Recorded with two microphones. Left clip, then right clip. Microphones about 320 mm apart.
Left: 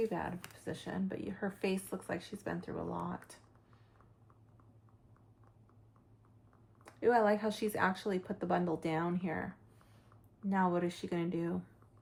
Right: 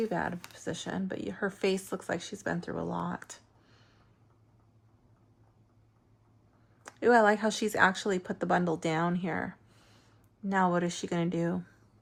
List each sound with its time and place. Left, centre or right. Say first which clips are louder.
0.6 s speech: right 5 dB; right
6.8 s speech: right 6 dB; right
10.5 s speech: right 5 dB; right